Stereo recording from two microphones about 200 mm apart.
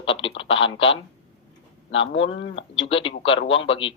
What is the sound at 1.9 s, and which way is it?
Speech, 65° left (ahead or behind).